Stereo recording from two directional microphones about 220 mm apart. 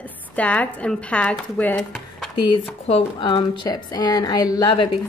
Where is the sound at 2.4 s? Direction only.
25° left (ahead or behind).